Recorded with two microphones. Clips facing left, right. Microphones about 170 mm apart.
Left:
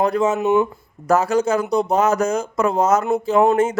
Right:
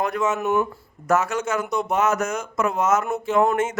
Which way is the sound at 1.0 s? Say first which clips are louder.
Left 5 dB; 30° left (ahead or behind).